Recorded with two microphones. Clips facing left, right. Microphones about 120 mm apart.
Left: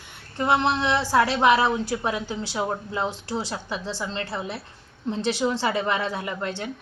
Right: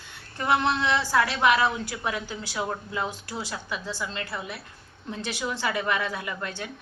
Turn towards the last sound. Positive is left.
turn(degrees=25)  # may be behind; listen again after turning